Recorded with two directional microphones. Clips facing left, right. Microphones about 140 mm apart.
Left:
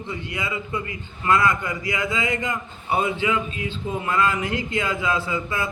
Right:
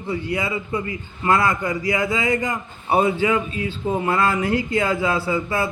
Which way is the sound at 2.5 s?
30° right (ahead or behind).